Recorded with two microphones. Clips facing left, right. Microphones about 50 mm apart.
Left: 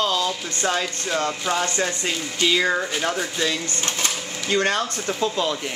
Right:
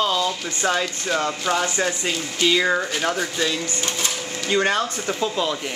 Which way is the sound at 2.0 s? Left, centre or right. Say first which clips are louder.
Right 1 dB; centre.